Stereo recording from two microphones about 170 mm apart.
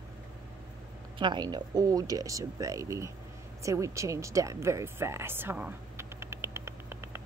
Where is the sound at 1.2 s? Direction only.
25° right (ahead or behind).